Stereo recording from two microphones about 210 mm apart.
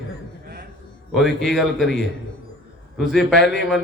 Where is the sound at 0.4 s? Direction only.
45° right (ahead or behind).